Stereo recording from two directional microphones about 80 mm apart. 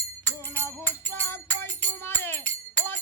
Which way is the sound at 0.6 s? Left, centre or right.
Left.